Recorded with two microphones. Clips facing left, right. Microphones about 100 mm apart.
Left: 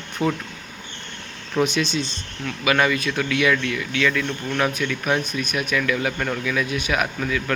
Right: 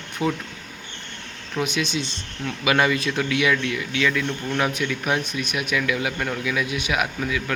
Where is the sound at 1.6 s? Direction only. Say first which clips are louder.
Left 4 dB; 10° right (ahead or behind).